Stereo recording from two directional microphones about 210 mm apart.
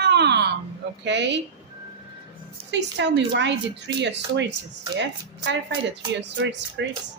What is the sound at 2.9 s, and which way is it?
A woman's voice, 55° right (ahead or behind).